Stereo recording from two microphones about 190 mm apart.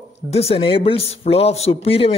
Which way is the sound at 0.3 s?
30° left (ahead or behind).